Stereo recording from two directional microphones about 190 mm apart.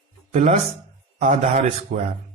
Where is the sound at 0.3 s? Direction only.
35° right (ahead or behind).